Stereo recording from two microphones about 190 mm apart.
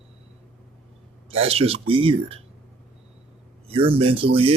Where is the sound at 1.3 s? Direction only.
30° right (ahead or behind).